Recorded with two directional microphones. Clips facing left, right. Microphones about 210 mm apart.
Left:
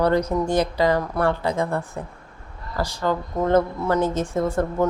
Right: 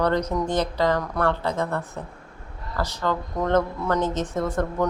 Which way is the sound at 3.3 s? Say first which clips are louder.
Left 4 dB; 25° left (ahead or behind).